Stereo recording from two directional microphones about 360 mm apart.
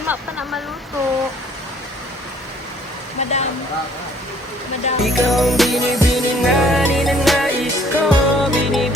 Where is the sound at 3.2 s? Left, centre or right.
Centre.